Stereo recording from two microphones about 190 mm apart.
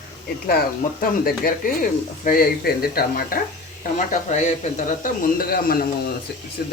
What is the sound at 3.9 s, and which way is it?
A man's voice, 40° left (ahead or behind).